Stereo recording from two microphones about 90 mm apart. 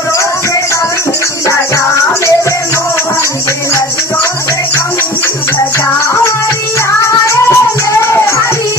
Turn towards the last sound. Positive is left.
turn(degrees=35)  # may be behind; listen again after turning